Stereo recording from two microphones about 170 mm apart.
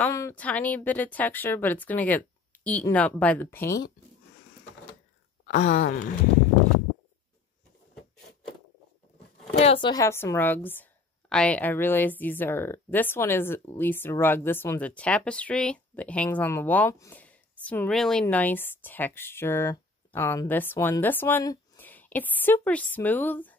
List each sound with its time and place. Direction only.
0.1 s a woman's voice: 15° left (ahead or behind)
5.5 s groan: 40° left (ahead or behind)
9.6 s speech: 30° left (ahead or behind)
10.0 s a woman's voice: 15° left (ahead or behind)